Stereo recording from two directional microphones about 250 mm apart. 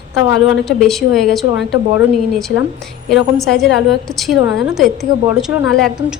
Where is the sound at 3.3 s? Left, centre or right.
Centre.